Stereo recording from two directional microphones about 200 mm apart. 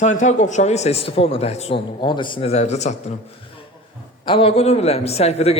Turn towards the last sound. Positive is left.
turn(degrees=30)  # may be behind; listen again after turning